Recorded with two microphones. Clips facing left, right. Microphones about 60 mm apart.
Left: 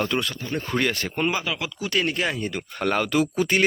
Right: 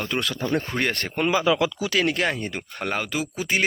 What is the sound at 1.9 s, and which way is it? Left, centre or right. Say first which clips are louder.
Speech: left 2 dB; right.